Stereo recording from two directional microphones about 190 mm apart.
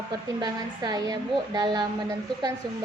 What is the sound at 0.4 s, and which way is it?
A woman's voice, 20° right (ahead or behind).